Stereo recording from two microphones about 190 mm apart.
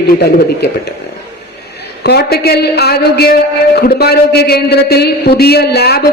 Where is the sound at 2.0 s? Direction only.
55° left (ahead or behind).